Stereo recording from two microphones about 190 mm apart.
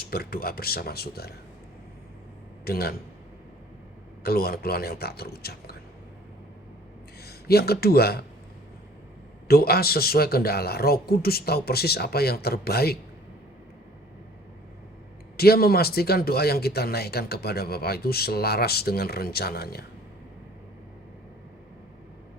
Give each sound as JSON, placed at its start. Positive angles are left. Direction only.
{"t": 0.0, "sound": "speech", "side_deg": 55}
{"t": 2.6, "sound": "speech", "side_deg": 55}
{"t": 4.2, "sound": "speech", "side_deg": 55}
{"t": 7.2, "sound": "speech", "side_deg": 55}
{"t": 9.5, "sound": "speech", "side_deg": 55}
{"t": 15.4, "sound": "speech", "side_deg": 55}